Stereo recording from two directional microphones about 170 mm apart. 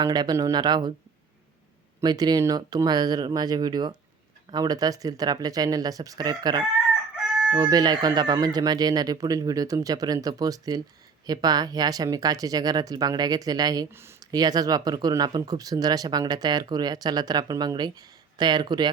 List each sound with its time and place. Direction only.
0.0 s speech: 25° right (ahead or behind)
2.0 s speech: 25° right (ahead or behind)